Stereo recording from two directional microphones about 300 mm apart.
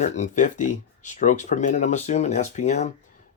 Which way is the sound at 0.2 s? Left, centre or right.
Left.